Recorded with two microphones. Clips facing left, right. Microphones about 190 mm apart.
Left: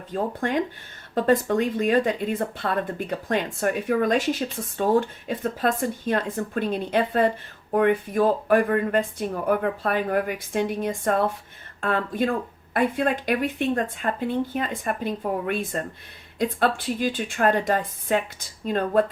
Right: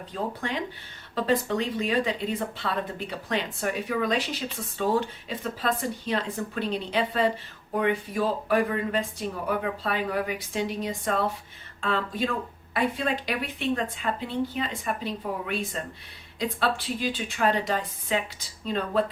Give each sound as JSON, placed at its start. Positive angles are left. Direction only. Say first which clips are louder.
{"t": 0.1, "sound": "speech", "louder": "left 6 dB", "side_deg": 50}